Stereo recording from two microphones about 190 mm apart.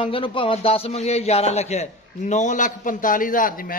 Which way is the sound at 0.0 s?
25° left (ahead or behind).